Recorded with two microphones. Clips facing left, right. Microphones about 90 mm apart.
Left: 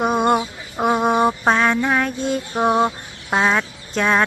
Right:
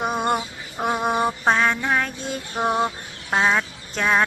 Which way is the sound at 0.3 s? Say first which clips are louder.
Left 5 dB; 20° left (ahead or behind).